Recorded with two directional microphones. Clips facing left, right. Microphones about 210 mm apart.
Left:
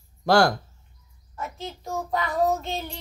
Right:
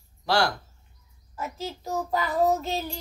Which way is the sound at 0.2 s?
50° left (ahead or behind).